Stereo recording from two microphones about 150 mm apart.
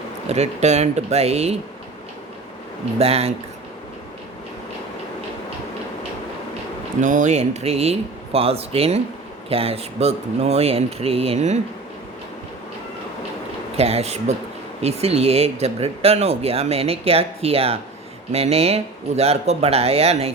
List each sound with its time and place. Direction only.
0.3 s speech: 50° right (ahead or behind)
3.0 s speech: 40° right (ahead or behind)
7.0 s speech: 55° right (ahead or behind)
13.7 s speech: 45° right (ahead or behind)